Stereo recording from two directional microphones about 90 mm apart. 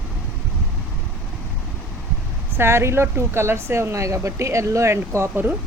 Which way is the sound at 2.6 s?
30° right (ahead or behind).